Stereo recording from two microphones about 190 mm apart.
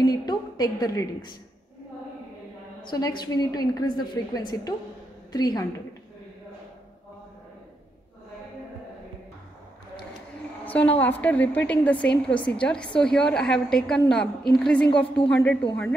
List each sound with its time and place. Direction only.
0.0 s a woman's voice: 20° left (ahead or behind)
2.9 s a woman's voice: 20° left (ahead or behind)
10.6 s a sound: 10° left (ahead or behind)
11.0 s a woman's voice: 10° left (ahead or behind)